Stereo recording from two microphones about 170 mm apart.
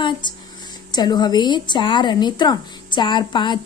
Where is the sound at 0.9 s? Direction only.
25° left (ahead or behind).